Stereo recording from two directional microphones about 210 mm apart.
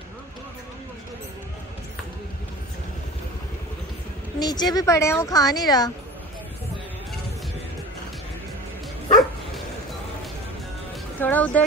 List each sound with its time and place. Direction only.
4.4 s a woman's voice: 20° left (ahead or behind)
11.1 s music: 10° left (ahead or behind)